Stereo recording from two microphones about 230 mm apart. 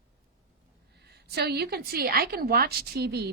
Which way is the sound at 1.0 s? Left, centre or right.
Right.